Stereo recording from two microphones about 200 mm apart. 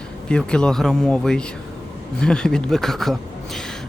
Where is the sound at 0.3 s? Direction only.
5° left (ahead or behind).